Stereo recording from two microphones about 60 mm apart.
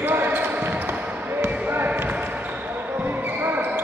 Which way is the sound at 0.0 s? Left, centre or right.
Right.